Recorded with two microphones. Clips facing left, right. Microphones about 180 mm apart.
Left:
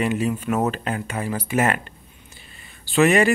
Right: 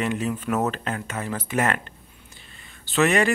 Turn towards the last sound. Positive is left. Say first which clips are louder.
# left 3 dB
turn(degrees=15)  # may be behind; listen again after turning